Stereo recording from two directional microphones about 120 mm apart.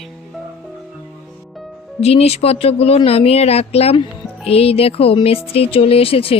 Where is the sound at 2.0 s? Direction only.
60° left (ahead or behind).